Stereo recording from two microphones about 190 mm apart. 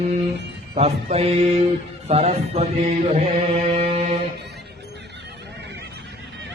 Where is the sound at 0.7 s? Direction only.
35° right (ahead or behind).